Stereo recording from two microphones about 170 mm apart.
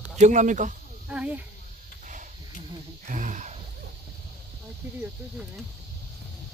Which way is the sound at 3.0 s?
45° right (ahead or behind).